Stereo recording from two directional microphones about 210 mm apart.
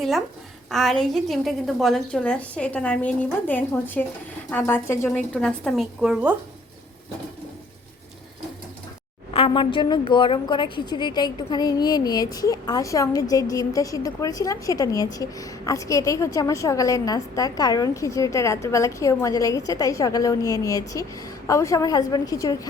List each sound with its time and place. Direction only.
0.7 s a woman's voice: centre (ahead or behind)
9.3 s a woman's voice: 25° left (ahead or behind)